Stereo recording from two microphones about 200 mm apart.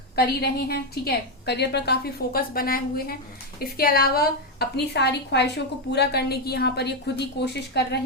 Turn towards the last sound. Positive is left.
turn(degrees=55)  # may be behind; listen again after turning